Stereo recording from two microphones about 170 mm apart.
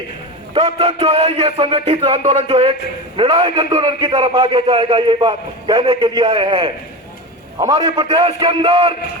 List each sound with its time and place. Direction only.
0.5 s a man's voice: 30° right (ahead or behind)